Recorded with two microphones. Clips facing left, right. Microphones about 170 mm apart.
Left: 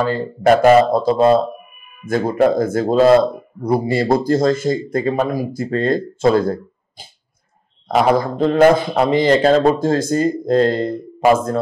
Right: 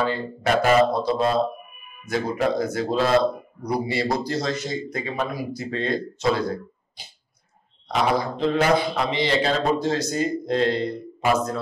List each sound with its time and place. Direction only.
0.0 s a man's voice: 45° left (ahead or behind)